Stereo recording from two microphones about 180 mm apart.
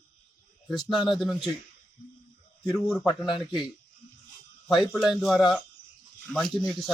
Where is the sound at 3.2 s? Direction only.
25° left (ahead or behind).